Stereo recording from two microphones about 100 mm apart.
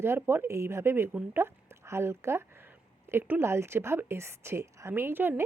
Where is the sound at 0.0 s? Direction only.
25° right (ahead or behind).